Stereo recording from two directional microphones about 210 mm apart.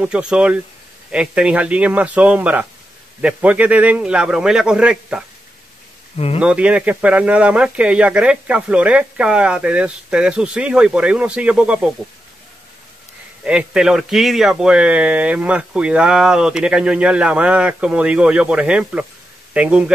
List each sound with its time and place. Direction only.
0.0 s speech: 5° right (ahead or behind)
6.1 s speech: 30° left (ahead or behind)
6.4 s speech: 5° right (ahead or behind)
13.4 s speech: 5° right (ahead or behind)